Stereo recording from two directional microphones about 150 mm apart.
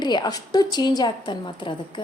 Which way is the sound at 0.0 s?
30° left (ahead or behind).